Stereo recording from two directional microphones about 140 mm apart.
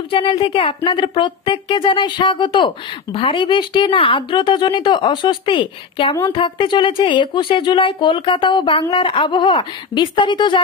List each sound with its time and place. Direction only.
0.1 s speech: 40° left (ahead or behind)